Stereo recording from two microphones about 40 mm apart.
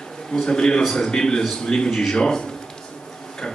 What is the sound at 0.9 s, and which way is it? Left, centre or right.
A man's voice, centre.